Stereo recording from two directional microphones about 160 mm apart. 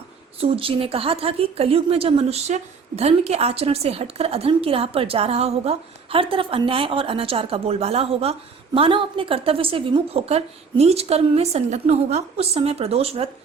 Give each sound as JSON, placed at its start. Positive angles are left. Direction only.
{"t": 0.3, "sound": "a woman's voice", "side_deg": -35}